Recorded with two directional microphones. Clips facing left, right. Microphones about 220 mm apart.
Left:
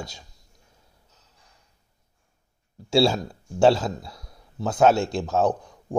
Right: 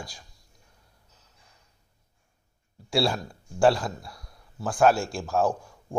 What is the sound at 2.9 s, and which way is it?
Speech, 25° left (ahead or behind).